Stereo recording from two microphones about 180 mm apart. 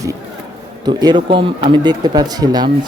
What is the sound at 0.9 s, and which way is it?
Speech, 25° right (ahead or behind).